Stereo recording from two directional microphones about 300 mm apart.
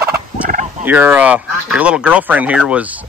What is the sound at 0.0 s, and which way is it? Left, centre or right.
Fowl, right.